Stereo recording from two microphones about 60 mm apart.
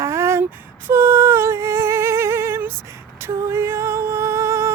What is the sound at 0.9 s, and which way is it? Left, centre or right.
Humming, right.